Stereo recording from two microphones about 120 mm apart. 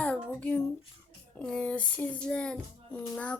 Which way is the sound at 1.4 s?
10° left (ahead or behind).